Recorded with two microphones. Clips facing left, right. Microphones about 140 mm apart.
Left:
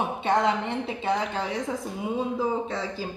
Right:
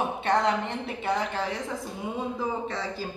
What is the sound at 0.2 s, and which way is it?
A woman's voice, 20° left (ahead or behind).